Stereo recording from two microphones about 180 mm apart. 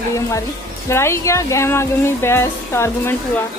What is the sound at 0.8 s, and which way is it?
Speech, 15° left (ahead or behind).